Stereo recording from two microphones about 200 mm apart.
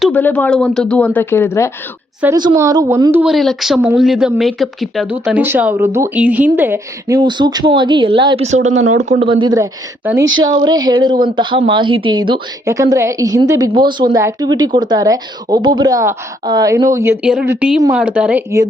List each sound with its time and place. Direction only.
0.0 s speech: 10° left (ahead or behind)
2.2 s a woman's voice: 20° right (ahead or behind)
7.2 s speech: 20° right (ahead or behind)
8.8 s speech: 90° right
9.0 s speech: 35° right (ahead or behind)
9.3 s a woman's voice: 20° right (ahead or behind)